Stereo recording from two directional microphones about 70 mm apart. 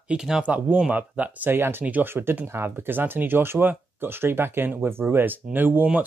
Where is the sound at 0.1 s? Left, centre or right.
Centre.